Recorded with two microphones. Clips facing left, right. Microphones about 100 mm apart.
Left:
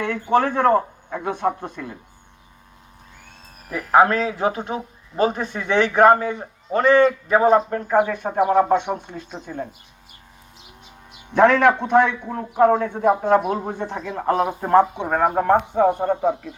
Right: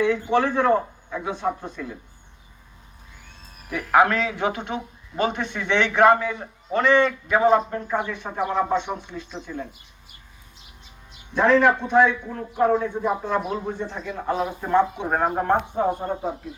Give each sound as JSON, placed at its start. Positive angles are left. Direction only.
{"t": 0.0, "sound": "a man's voice", "side_deg": 55}
{"t": 3.7, "sound": "a man's voice", "side_deg": 35}
{"t": 11.3, "sound": "a man's voice", "side_deg": 65}
{"t": 15.7, "sound": "speech", "side_deg": 80}